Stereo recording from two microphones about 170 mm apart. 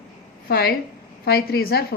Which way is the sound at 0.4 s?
65° left (ahead or behind).